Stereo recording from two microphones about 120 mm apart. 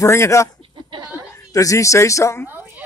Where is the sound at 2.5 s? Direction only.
15° right (ahead or behind).